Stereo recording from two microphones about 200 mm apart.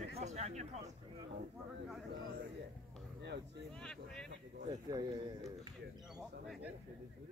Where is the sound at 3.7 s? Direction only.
5° left (ahead or behind).